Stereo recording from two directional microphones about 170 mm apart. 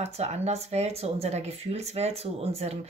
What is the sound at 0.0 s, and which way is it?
Speech, 40° right (ahead or behind).